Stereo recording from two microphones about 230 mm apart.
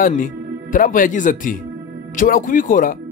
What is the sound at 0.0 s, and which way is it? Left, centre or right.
A man's voice, left.